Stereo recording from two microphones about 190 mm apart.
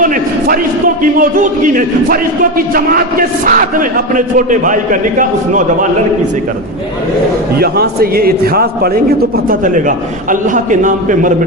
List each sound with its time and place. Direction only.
0.0 s a man's voice: 45° right (ahead or behind)
7.6 s a man's voice: 55° right (ahead or behind)